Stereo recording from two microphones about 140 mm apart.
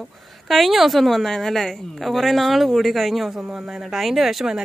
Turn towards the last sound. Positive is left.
turn(degrees=0)  # may be behind; listen again after turning